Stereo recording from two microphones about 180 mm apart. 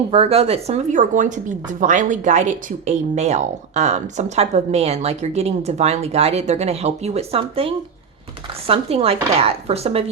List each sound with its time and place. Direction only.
0.1 s speech: 35° right (ahead or behind)